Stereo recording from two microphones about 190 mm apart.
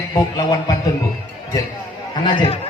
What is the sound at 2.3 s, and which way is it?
Speech, 30° left (ahead or behind).